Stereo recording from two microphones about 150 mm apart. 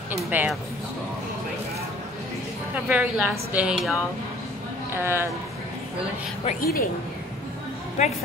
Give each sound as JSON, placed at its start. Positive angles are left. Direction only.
{"t": 0.3, "sound": "a woman's voice", "side_deg": -10}
{"t": 2.7, "sound": "a woman's voice", "side_deg": -10}
{"t": 4.9, "sound": "a woman's voice", "side_deg": -15}
{"t": 6.6, "sound": "a woman's voice", "side_deg": 80}
{"t": 8.0, "sound": "speech", "side_deg": 50}